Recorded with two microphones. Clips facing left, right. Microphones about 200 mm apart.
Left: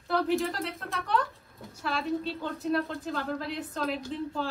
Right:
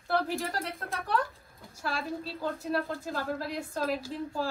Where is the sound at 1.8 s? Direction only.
Centre (ahead or behind).